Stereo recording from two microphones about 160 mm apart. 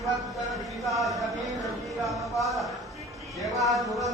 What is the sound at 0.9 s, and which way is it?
Speech, centre (ahead or behind).